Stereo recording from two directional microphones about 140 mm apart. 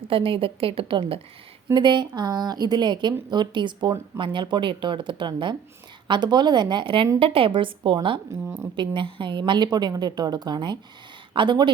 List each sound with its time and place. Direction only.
0.1 s a woman's voice: 40° right (ahead or behind)